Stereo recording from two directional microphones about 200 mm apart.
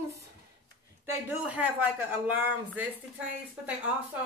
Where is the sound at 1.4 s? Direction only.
5° right (ahead or behind).